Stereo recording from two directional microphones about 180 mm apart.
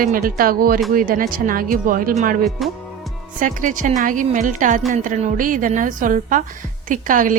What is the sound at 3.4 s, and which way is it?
A woman's voice, 45° right (ahead or behind).